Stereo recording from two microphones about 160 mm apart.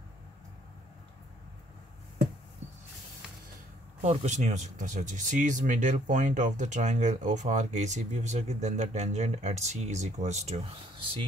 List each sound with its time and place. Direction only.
4.0 s speech: 45° right (ahead or behind)